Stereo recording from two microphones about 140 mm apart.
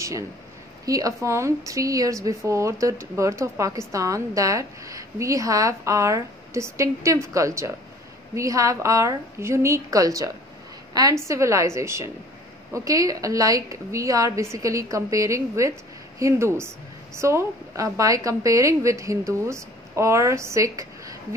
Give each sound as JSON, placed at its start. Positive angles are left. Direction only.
{"t": 0.8, "sound": "a woman's voice", "side_deg": -25}